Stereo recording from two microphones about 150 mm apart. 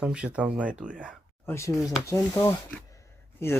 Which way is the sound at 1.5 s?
20° left (ahead or behind).